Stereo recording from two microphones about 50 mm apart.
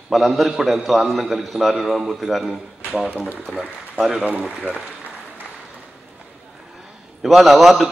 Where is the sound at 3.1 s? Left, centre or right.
Right.